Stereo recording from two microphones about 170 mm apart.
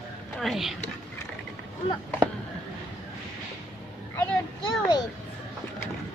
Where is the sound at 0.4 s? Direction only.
Centre (ahead or behind).